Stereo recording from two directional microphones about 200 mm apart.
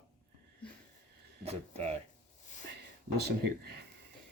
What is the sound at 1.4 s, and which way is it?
Speech, 30° right (ahead or behind).